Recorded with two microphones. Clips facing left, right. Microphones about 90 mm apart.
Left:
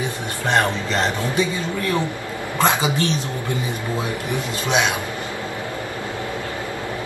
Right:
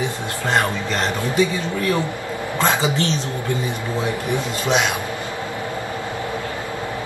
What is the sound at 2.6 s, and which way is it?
Speech, 20° left (ahead or behind).